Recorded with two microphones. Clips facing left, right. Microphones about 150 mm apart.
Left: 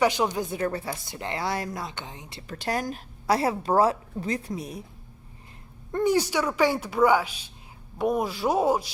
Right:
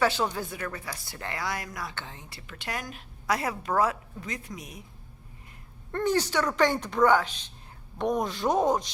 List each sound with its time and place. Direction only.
0.0 s speech: 15° left (ahead or behind)
0.3 s speech: 25° left (ahead or behind)
2.5 s a woman's voice: 35° left (ahead or behind)
5.9 s speech: 10° left (ahead or behind)